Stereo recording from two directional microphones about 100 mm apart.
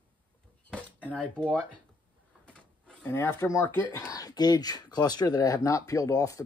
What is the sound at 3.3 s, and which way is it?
Speech, 30° left (ahead or behind).